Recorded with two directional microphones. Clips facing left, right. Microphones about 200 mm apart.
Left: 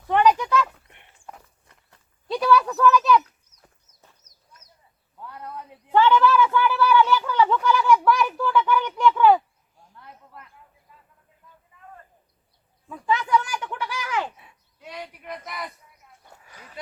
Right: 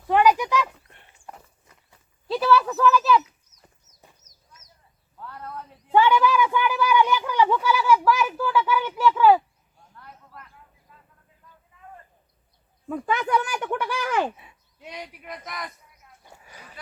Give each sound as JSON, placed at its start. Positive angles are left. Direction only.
{"t": 0.1, "sound": "a sound", "side_deg": -10}
{"t": 1.3, "sound": "walk", "side_deg": -5}
{"t": 5.2, "sound": "a sound", "side_deg": 15}
{"t": 5.9, "sound": "a woman's voice", "side_deg": -10}
{"t": 12.9, "sound": "speech", "side_deg": -55}
{"t": 14.8, "sound": "speech", "side_deg": -20}
{"t": 15.2, "sound": "speech", "side_deg": 0}
{"t": 16.2, "sound": "roaring cats", "side_deg": -5}